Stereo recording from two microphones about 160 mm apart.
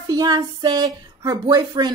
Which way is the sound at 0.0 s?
25° right (ahead or behind).